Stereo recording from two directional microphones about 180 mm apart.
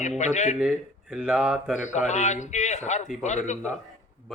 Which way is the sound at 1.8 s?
40° left (ahead or behind).